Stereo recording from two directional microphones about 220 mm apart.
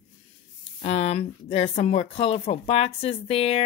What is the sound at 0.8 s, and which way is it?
Speech, 30° left (ahead or behind).